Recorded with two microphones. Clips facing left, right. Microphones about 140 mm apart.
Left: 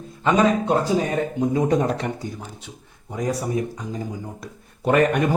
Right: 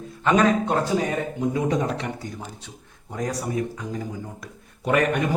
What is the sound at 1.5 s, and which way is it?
Speech, 40° left (ahead or behind).